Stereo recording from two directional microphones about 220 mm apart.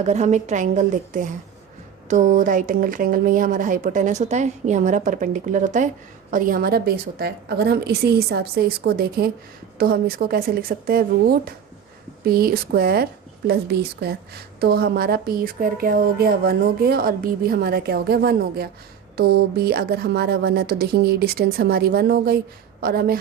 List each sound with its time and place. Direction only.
0.0 s a woman's voice: 30° right (ahead or behind)